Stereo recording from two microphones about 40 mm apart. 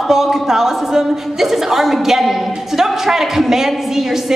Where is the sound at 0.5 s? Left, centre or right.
Centre.